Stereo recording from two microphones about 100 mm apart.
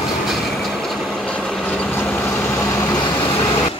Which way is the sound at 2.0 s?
20° left (ahead or behind).